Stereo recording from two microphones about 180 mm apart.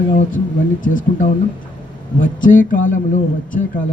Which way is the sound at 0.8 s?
45° left (ahead or behind).